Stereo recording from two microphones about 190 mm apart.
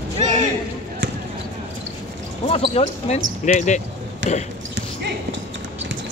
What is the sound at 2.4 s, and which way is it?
Speech, 30° left (ahead or behind).